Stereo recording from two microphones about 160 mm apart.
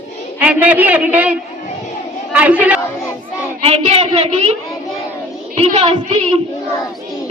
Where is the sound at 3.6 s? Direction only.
40° right (ahead or behind).